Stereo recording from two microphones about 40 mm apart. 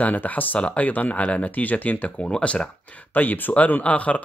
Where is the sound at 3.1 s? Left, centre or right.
Left.